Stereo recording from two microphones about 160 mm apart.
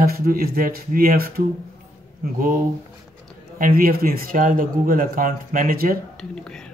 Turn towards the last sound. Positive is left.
turn(degrees=5)  # may be behind; listen again after turning